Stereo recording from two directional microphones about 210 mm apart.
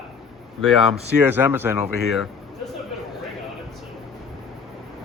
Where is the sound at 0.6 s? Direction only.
Centre (ahead or behind).